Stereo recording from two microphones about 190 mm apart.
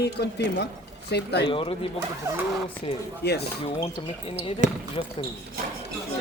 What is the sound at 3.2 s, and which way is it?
Speech, 60° left (ahead or behind).